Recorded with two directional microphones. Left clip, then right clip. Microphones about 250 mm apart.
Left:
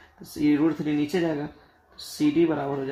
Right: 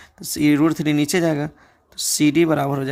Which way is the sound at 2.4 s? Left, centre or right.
Right.